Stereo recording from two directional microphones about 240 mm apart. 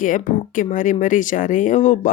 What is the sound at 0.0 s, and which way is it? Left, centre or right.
Speech, left.